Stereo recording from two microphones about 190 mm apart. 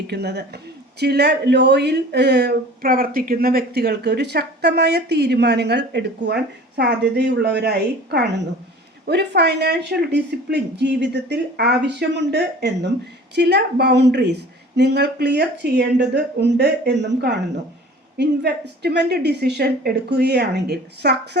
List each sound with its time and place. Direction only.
0.1 s speech: 60° right (ahead or behind)